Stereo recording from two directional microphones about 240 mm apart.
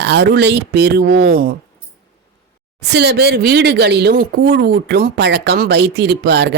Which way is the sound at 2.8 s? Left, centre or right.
Right.